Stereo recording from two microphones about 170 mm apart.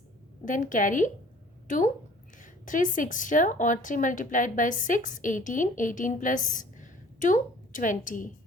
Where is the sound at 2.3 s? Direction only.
50° left (ahead or behind).